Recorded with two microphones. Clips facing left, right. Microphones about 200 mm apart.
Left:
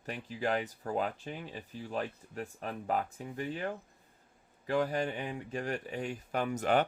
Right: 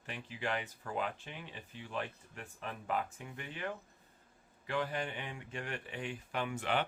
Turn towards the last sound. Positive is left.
turn(degrees=45)  # may be behind; listen again after turning